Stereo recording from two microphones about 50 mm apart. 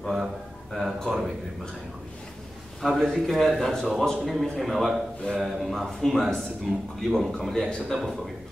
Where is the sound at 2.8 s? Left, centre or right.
Centre.